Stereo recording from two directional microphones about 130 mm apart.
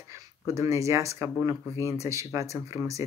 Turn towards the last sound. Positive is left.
turn(degrees=-25)  # may be behind; listen again after turning